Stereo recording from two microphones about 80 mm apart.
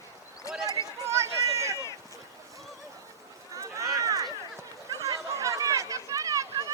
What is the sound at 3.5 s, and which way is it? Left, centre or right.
Run, right.